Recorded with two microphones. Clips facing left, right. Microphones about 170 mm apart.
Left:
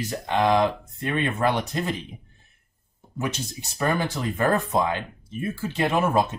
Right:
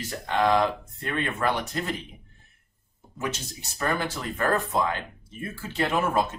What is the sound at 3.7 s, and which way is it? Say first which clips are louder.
Speech: left 3 dB; 20° left (ahead or behind).